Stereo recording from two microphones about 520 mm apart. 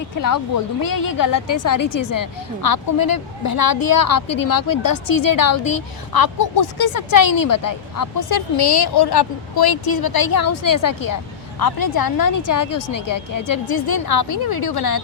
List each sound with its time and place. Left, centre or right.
0.2 s a woman's voice: left